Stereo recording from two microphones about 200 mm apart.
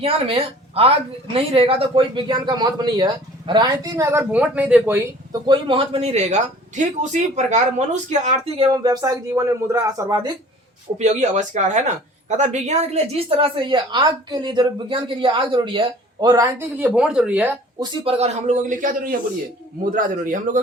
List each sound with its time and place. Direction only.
0.0 s a woman's voice: 30° right (ahead or behind); by 5.4 s 10° right (ahead or behind)
5.5 s a man's voice: 25° right (ahead or behind)
10.9 s a woman's voice: 35° right (ahead or behind); by 17.8 s 10° right (ahead or behind)
18.0 s a man's voice: 30° right (ahead or behind)